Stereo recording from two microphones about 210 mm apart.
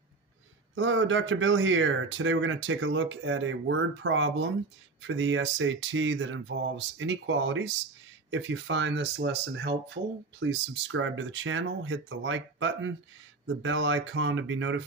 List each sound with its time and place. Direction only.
0.7 s speech: 65° right (ahead or behind)